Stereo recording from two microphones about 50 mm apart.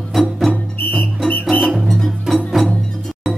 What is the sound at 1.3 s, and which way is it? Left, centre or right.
Music, left.